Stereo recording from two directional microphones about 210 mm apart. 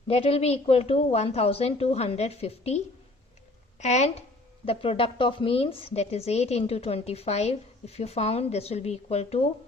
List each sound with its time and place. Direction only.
0.1 s a woman's voice: 30° left (ahead or behind)